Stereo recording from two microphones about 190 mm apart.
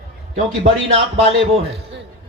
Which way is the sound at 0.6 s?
35° right (ahead or behind).